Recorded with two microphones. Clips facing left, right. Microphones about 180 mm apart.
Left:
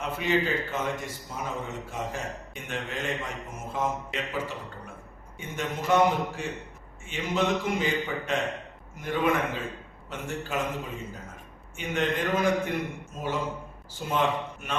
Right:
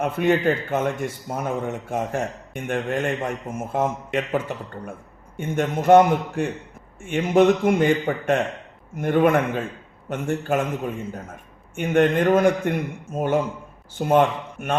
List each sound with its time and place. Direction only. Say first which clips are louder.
0.0 s a man's voice: right 7 dB; 55° right (ahead or behind)